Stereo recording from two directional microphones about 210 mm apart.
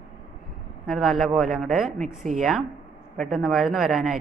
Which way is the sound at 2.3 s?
35° right (ahead or behind).